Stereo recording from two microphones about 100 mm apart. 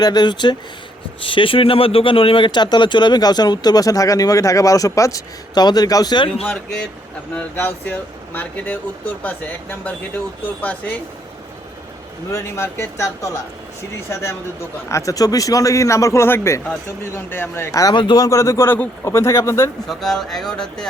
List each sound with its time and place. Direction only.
0.0 s speech: 45° left (ahead or behind)
1.2 s speech: 60° left (ahead or behind)
6.4 s speech: 5° left (ahead or behind)
7.3 s speech: 20° left (ahead or behind)
12.3 s a man's voice: 25° left (ahead or behind)
17.9 s speech: 55° left (ahead or behind)
18.2 s a man's voice: 30° left (ahead or behind)
19.9 s speech: 5° left (ahead or behind)